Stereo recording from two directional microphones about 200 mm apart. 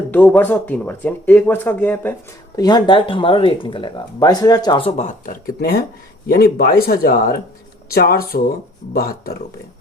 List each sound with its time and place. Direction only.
0.1 s speech: 10° left (ahead or behind)
2.6 s speech: 20° left (ahead or behind); by 9.4 s 45° left (ahead or behind)